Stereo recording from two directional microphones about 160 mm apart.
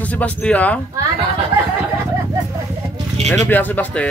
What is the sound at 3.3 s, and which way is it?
Speech, 10° left (ahead or behind).